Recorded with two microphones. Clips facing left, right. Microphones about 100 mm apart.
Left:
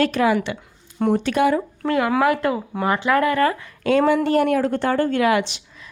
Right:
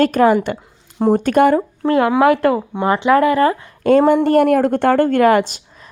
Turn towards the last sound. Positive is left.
turn(degrees=-45)  # may be behind; listen again after turning